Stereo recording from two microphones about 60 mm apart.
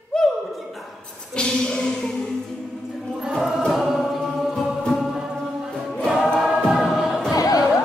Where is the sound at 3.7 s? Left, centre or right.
Centre.